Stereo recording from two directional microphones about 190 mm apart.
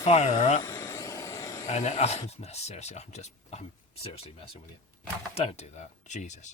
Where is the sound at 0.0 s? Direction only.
35° left (ahead or behind).